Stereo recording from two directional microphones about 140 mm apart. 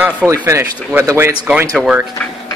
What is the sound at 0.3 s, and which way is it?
Speech, 20° right (ahead or behind).